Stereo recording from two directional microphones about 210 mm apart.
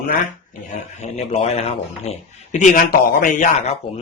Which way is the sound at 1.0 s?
30° left (ahead or behind).